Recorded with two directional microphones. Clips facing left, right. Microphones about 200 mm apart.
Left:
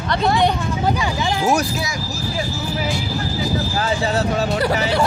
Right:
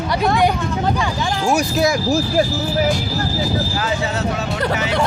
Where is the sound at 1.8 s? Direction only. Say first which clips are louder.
Right 10 dB; 55° right (ahead or behind).